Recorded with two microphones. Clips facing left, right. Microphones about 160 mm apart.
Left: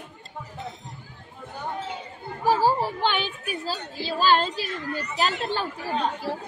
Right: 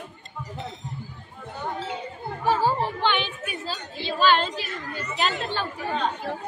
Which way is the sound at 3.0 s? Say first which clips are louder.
Right 1 dB; 40° left (ahead or behind).